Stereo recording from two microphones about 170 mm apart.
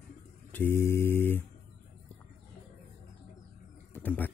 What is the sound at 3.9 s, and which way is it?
Wild animals, 10° left (ahead or behind).